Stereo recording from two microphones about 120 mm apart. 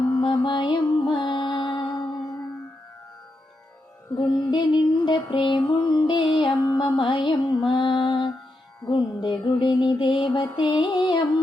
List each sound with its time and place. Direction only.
0.1 s music: 40° left (ahead or behind)
4.1 s music: 40° left (ahead or behind)